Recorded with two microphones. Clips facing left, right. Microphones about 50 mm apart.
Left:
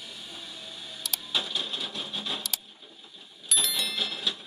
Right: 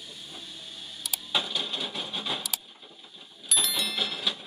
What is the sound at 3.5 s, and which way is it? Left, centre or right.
Clock, centre.